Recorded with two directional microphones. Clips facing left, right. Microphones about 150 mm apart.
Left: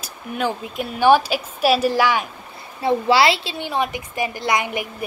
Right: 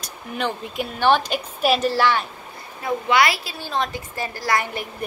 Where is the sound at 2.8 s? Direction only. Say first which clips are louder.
Left 3 dB; 30° left (ahead or behind).